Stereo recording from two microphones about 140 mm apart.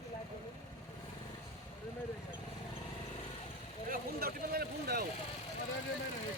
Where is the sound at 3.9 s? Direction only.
90° right.